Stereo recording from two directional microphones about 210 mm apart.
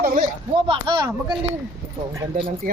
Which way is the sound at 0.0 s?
40° right (ahead or behind).